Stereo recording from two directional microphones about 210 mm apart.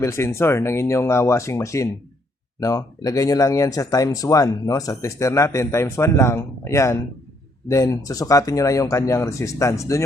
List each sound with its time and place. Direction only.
0.0 s speech: 15° left (ahead or behind)